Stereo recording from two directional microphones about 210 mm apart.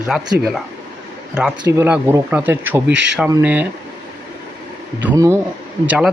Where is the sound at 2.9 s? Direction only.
55° right (ahead or behind).